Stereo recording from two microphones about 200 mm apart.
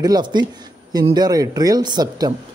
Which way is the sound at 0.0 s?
20° right (ahead or behind).